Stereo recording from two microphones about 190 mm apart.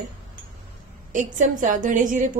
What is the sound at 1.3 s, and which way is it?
Speech, 40° right (ahead or behind).